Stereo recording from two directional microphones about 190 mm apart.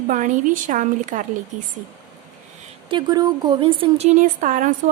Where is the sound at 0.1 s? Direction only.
45° right (ahead or behind).